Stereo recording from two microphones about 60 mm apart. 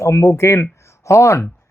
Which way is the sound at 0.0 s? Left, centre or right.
Left.